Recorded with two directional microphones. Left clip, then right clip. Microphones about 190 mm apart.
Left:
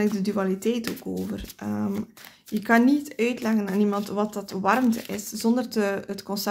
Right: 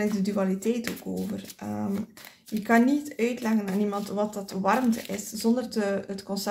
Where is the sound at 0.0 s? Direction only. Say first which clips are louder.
Left 2 dB; 35° left (ahead or behind).